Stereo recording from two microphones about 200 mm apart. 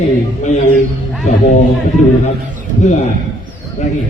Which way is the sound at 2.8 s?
40° left (ahead or behind).